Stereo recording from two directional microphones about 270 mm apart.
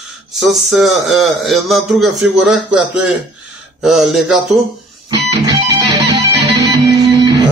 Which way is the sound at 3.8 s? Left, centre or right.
Centre.